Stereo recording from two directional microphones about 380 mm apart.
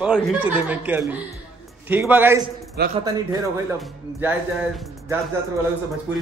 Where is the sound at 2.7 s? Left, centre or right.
Right.